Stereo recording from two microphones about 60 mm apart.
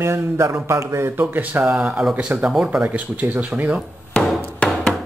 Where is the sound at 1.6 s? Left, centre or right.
Centre.